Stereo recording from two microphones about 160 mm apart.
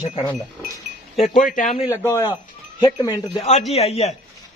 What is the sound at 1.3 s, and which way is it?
Speech, 55° left (ahead or behind).